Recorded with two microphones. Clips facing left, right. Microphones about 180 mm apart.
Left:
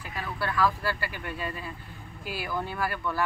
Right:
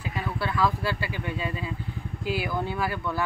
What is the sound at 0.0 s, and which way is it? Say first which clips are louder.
Speech: right 3 dB; 20° right (ahead or behind).